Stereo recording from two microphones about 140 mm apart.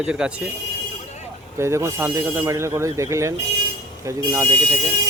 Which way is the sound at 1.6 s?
20° right (ahead or behind).